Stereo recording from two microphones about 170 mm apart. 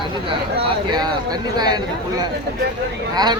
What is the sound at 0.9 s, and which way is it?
Speech, 25° right (ahead or behind).